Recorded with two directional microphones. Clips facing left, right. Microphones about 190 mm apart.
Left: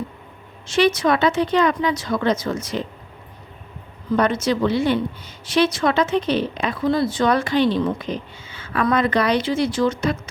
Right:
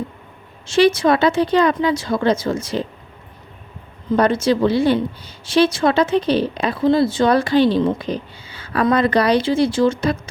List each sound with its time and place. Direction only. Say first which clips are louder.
0.8 s speech: right 3 dB; 30° right (ahead or behind)
4.2 s speech: right 4 dB; 30° right (ahead or behind)